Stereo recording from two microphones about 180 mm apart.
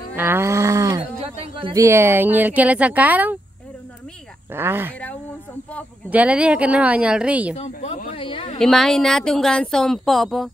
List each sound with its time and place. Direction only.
0.1 s wild animals: 10° right (ahead or behind)
1.2 s a sound: 30° right (ahead or behind)
1.8 s speech: 15° right (ahead or behind)
4.5 s speech: 10° right (ahead or behind)
6.0 s speech: 10° right (ahead or behind)
7.5 s speech: 40° left (ahead or behind)
8.1 s a sound: 30° left (ahead or behind)
8.5 s speech: centre (ahead or behind)